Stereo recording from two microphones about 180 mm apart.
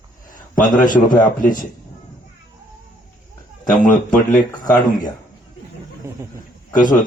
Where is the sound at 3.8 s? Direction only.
45° left (ahead or behind).